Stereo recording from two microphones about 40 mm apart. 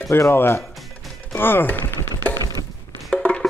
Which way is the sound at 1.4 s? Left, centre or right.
Left.